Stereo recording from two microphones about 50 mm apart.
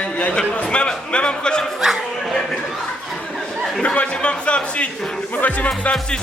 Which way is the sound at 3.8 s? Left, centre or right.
Left.